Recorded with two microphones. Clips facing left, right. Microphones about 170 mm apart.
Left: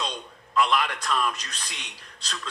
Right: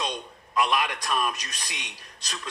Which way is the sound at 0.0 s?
15° right (ahead or behind).